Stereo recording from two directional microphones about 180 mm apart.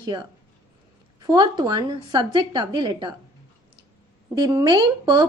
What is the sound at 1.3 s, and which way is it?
Speech, 25° right (ahead or behind).